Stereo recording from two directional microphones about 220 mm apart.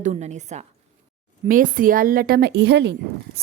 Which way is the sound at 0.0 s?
30° right (ahead or behind).